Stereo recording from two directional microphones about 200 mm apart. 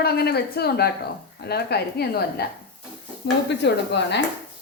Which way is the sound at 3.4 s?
60° left (ahead or behind).